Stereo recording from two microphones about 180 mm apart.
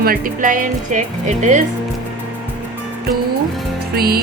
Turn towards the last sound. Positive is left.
turn(degrees=-60)  # may be behind; listen again after turning